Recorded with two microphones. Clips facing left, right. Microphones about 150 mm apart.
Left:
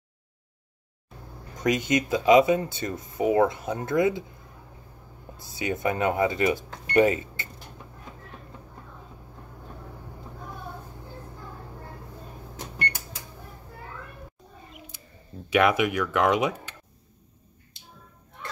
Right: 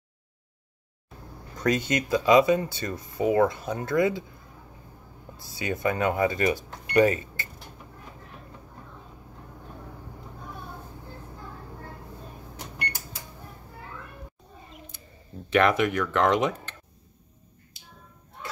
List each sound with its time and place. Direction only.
1.6 s speech: 15° left (ahead or behind)
5.4 s speech: 20° left (ahead or behind)
15.5 s speech: 10° left (ahead or behind)